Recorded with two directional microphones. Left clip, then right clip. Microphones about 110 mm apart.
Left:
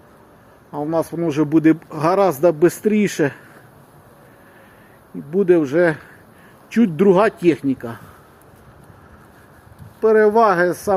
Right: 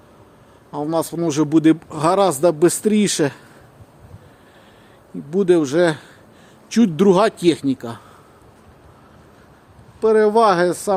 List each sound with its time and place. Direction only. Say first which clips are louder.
0.7 s speech: even; 5° right (ahead or behind)
2.7 s speech: even; 40° right (ahead or behind)
5.4 s speech: left 1 dB; 40° right (ahead or behind)
5.7 s speech: even; 15° right (ahead or behind)
6.7 s speech: even; 40° right (ahead or behind)
10.0 s speech: left 1 dB; centre (ahead or behind)